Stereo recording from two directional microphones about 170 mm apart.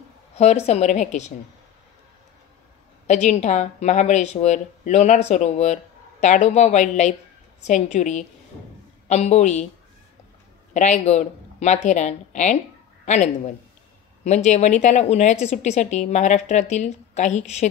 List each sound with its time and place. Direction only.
0.4 s a woman's voice: 40° left (ahead or behind)
3.1 s a woman's voice: 40° left (ahead or behind)
10.7 s a woman's voice: 45° left (ahead or behind)